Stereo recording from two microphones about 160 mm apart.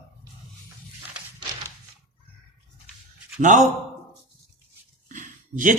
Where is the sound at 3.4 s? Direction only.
50° right (ahead or behind).